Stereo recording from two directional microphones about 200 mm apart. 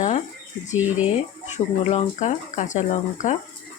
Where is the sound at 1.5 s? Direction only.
35° left (ahead or behind).